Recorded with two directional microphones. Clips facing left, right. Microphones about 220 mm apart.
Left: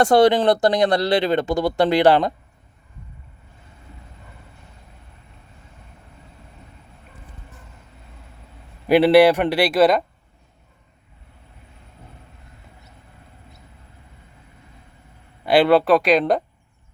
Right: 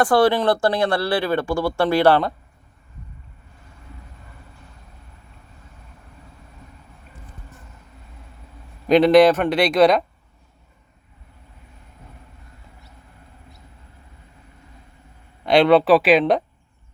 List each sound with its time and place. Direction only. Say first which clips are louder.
0.0 s speech: left 2 dB; 20° left (ahead or behind)
8.9 s speech: even; 10° left (ahead or behind)
15.4 s speech: right 1 dB; 5° left (ahead or behind)